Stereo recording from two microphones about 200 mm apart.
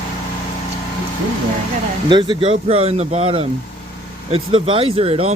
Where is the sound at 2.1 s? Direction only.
25° right (ahead or behind).